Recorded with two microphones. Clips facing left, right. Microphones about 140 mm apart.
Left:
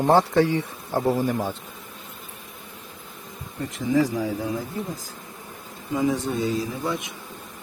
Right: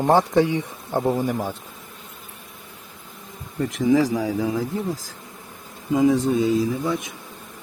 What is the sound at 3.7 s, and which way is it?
Speech, 80° right.